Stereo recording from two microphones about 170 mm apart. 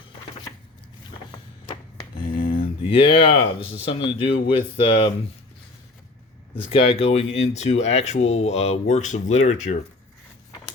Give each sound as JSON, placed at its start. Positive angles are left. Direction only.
{"t": 1.6, "sound": "a sound", "side_deg": 30}
{"t": 4.4, "sound": "speech", "side_deg": 30}
{"t": 6.6, "sound": "speech", "side_deg": 35}